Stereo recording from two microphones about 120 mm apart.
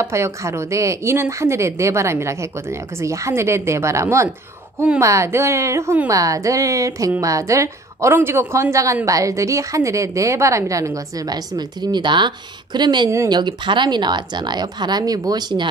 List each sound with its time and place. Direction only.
0.0 s a woman's voice: 25° right (ahead or behind)